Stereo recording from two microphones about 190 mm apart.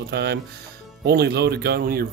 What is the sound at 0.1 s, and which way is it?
Speech, 60° right (ahead or behind).